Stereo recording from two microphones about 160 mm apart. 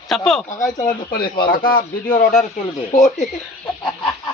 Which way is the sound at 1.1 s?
75° left (ahead or behind).